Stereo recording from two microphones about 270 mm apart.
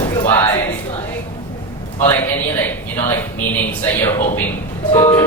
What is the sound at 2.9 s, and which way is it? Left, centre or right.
Speech, centre.